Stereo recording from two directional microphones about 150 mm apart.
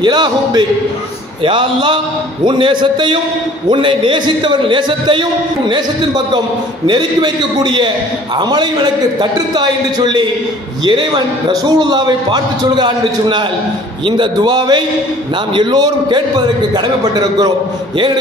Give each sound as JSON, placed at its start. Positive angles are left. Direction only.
{"t": 0.0, "sound": "a man's voice", "side_deg": -30}